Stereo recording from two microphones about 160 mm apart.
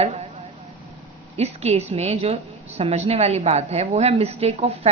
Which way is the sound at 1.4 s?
40° right (ahead or behind).